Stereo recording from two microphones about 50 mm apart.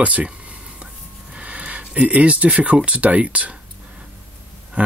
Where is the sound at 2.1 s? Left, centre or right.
Right.